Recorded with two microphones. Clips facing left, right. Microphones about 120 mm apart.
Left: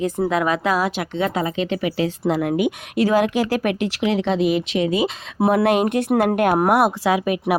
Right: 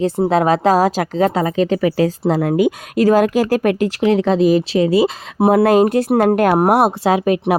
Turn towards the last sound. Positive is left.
turn(degrees=-30)  # may be behind; listen again after turning